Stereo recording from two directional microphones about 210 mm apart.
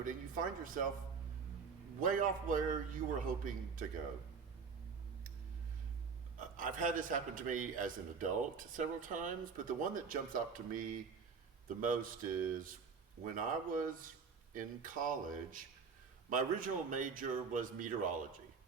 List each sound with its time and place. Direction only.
0.0 s speech: 40° right (ahead or behind)
2.0 s a man's voice: 40° right (ahead or behind)
6.6 s a man's voice: 40° right (ahead or behind)